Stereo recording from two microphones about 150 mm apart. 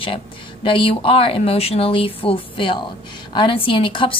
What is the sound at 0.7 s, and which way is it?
A woman's voice, 35° left (ahead or behind).